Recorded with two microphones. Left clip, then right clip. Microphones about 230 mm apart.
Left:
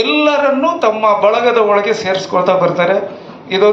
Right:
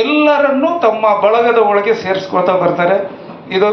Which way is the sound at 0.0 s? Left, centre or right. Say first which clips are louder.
Right 1 dB; left.